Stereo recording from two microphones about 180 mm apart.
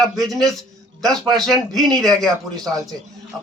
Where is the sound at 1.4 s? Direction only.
Centre (ahead or behind).